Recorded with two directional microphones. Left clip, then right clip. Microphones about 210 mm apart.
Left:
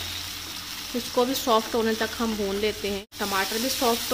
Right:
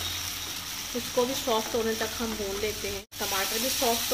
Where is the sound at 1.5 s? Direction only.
45° left (ahead or behind).